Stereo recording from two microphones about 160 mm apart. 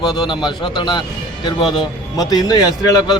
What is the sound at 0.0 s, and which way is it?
A man's voice, 25° left (ahead or behind).